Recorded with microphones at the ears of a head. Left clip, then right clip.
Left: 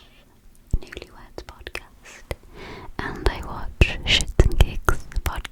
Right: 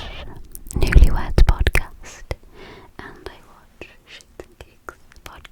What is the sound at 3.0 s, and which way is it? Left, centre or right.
Whispering, left.